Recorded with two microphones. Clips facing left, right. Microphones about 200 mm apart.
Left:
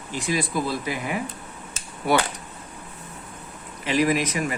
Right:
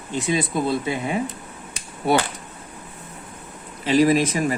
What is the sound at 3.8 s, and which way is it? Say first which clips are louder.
Speech: right 5 dB; 30° right (ahead or behind).